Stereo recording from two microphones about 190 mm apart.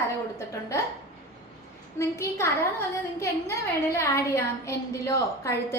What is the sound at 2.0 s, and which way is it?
A woman's voice, 15° left (ahead or behind).